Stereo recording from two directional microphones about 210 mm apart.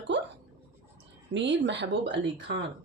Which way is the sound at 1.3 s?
55° right (ahead or behind).